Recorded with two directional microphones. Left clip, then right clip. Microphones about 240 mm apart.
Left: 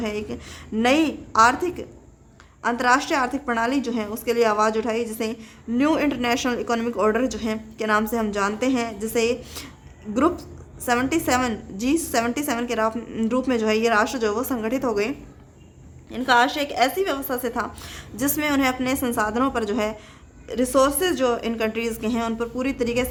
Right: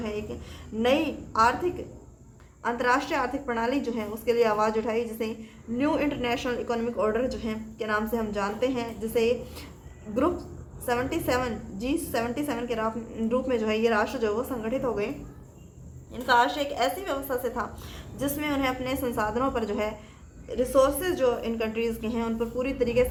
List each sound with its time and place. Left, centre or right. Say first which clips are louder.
0.0 s a sound: left 5 dB; left
0.8 s a woman's voice: left 5 dB; left
16.1 s a woman's voice: left 4 dB; left